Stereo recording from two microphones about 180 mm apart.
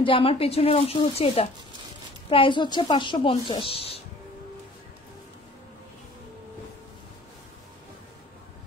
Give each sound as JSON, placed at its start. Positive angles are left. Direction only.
{"t": 0.0, "sound": "a woman's voice", "side_deg": 30}